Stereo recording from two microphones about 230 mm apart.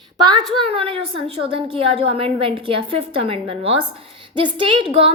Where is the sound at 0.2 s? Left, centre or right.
Centre.